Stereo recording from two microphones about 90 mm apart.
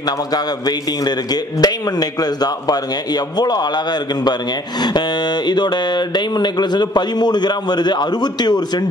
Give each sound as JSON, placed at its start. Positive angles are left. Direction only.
{"t": 0.0, "sound": "a man's voice", "side_deg": 50}